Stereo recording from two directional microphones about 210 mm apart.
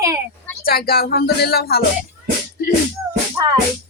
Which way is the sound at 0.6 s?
45° left (ahead or behind).